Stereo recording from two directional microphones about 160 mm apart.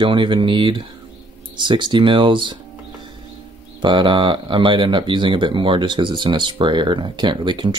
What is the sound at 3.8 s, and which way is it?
Speech, 30° right (ahead or behind).